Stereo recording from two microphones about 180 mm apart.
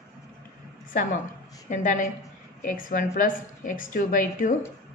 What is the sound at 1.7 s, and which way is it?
A woman's voice, 45° left (ahead or behind).